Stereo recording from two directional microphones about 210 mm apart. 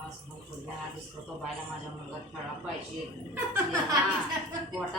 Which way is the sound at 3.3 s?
10° right (ahead or behind).